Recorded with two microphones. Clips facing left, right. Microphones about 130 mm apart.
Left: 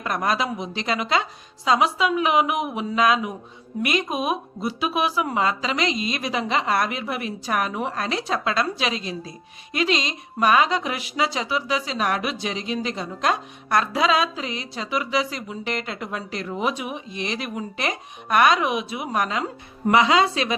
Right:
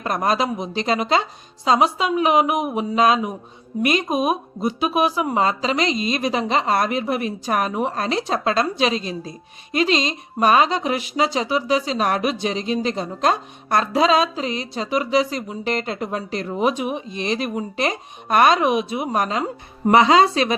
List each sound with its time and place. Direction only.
0.0 s a woman's voice: 35° right (ahead or behind)
16.9 s a woman's voice: 30° right (ahead or behind)